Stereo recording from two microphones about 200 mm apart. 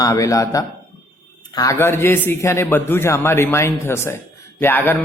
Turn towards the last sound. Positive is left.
turn(degrees=10)  # may be behind; listen again after turning